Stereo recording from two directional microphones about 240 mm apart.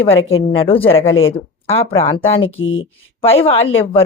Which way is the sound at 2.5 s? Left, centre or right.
Left.